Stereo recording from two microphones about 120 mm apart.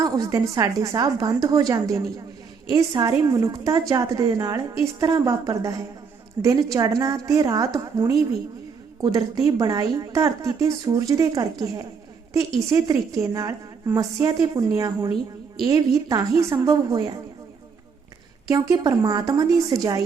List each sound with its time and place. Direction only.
0.0 s a woman's voice: 25° right (ahead or behind)
18.4 s a woman's voice: 30° right (ahead or behind)